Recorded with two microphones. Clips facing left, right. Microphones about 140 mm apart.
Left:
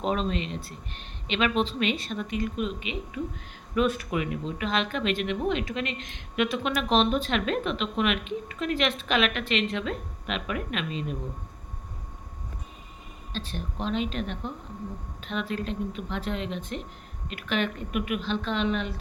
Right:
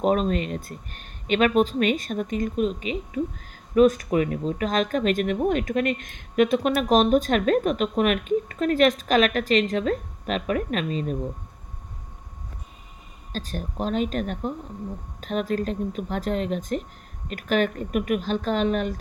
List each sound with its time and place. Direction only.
0.0 s speech: 45° right (ahead or behind)
13.3 s speech: 40° right (ahead or behind)